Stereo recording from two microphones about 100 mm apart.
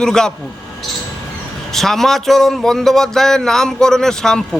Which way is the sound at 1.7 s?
5° left (ahead or behind).